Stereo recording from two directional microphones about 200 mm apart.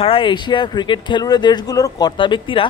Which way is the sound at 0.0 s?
25° left (ahead or behind).